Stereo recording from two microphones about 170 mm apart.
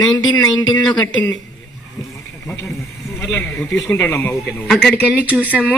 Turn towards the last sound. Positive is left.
turn(degrees=-10)  # may be behind; listen again after turning